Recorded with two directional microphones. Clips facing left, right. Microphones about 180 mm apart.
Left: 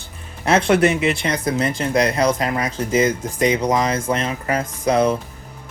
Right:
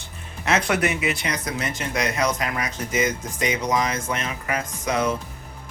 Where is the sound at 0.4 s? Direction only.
30° left (ahead or behind).